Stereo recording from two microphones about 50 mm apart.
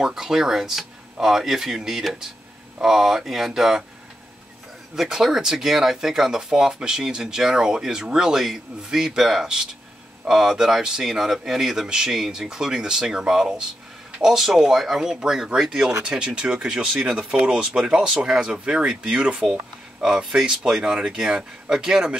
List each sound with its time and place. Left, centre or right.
0.0 s speech: centre
4.9 s speech: centre